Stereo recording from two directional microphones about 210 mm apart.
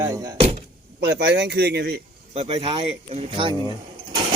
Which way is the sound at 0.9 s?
55° right (ahead or behind).